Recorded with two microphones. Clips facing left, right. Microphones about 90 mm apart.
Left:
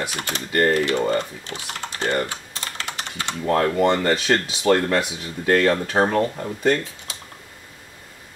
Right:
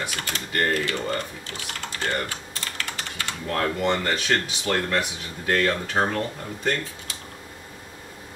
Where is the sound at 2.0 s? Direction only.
20° left (ahead or behind).